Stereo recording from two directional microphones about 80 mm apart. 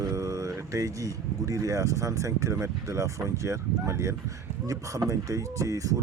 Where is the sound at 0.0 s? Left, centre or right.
Right.